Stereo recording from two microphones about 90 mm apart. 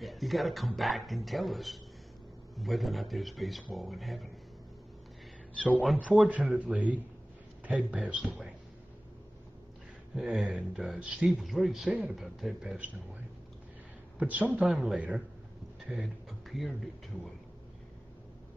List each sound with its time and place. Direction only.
0.0 s speech: centre (ahead or behind)
6.0 s speech: 15° right (ahead or behind)
10.1 s speech: 5° right (ahead or behind)
11.0 s speech: 15° right (ahead or behind)
11.4 s speech: centre (ahead or behind)
14.1 s a man's voice: 15° right (ahead or behind)
14.6 s speech: 5° right (ahead or behind)